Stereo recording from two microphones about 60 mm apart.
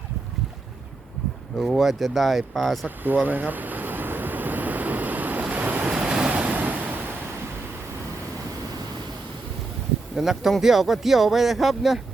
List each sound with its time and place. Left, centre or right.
1.5 s speech: centre
2.8 s vehicle: right
5.9 s waves: centre
10.2 s speech: centre